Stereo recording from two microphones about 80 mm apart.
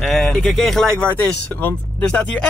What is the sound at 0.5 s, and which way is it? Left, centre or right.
Speech, centre.